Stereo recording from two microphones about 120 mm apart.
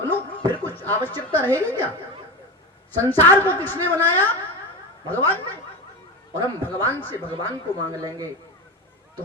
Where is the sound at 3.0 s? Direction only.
15° left (ahead or behind).